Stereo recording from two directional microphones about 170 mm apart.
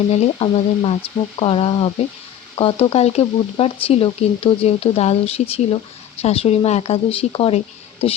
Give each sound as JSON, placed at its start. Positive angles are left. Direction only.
{"t": 0.1, "sound": "speech", "side_deg": 35}